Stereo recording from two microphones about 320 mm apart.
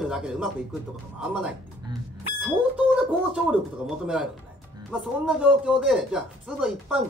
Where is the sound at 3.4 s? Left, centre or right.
Centre.